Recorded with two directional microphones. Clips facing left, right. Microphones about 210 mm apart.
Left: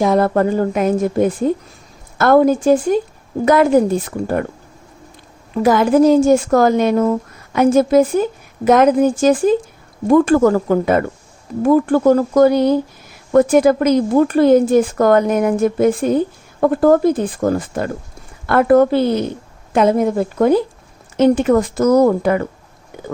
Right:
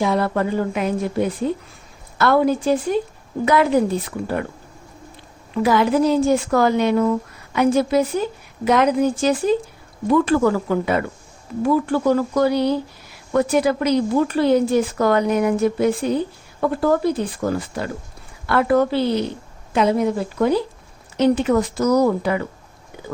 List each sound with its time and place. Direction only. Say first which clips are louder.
0.0 s speech: left 6 dB; 45° left (ahead or behind)
5.6 s speech: left 5 dB; 45° left (ahead or behind)